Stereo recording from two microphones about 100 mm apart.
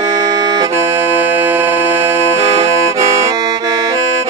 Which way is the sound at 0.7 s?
20° right (ahead or behind).